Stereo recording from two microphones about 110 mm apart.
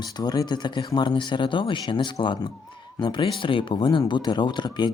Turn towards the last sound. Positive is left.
turn(degrees=40)  # may be behind; listen again after turning